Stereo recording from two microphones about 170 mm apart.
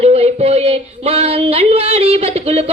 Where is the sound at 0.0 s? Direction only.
35° right (ahead or behind).